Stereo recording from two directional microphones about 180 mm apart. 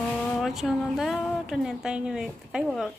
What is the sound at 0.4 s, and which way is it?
Speech, centre (ahead or behind).